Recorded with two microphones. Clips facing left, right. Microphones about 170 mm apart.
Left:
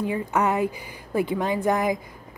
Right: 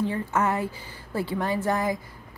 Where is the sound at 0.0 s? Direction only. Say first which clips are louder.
Left 2 dB; 15° left (ahead or behind).